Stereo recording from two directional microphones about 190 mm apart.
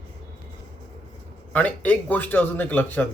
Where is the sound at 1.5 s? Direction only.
10° left (ahead or behind).